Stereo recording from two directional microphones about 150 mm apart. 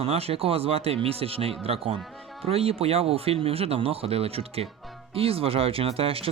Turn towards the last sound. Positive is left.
turn(degrees=-40)  # may be behind; listen again after turning